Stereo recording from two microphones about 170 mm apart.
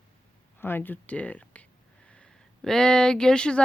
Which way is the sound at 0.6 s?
10° left (ahead or behind).